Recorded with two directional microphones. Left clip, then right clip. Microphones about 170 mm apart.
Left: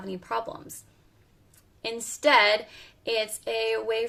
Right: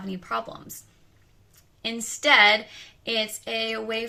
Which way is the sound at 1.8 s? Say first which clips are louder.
Right 2 dB; 45° left (ahead or behind).